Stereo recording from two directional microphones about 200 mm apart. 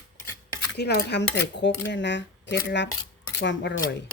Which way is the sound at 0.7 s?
55° left (ahead or behind).